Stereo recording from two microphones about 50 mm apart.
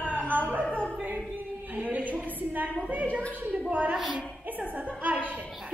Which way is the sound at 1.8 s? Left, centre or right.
Right.